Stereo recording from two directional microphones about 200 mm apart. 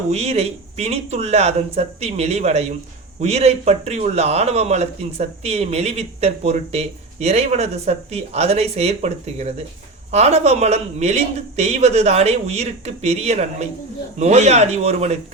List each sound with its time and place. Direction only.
0.1 s a man's voice: 30° right (ahead or behind)